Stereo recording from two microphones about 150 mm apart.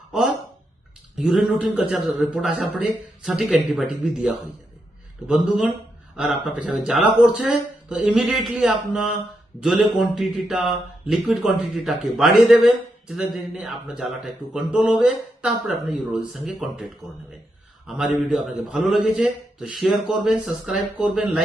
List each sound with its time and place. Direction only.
0.1 s speech: 5° right (ahead or behind)